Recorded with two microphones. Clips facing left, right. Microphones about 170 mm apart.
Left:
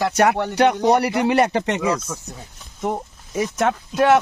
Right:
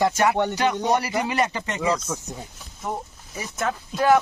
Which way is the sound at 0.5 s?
65° left (ahead or behind).